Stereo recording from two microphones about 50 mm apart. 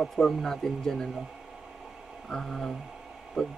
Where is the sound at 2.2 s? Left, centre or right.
Centre.